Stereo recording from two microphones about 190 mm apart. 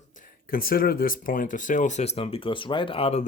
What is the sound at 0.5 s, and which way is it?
Speech, 50° left (ahead or behind).